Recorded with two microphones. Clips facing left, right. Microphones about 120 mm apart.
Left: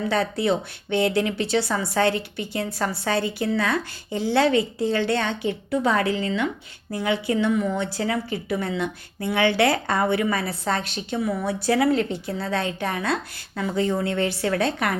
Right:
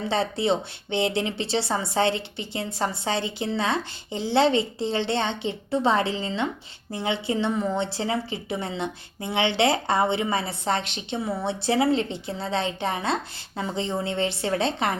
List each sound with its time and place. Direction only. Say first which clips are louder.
0.1 s speech: even; 25° right (ahead or behind)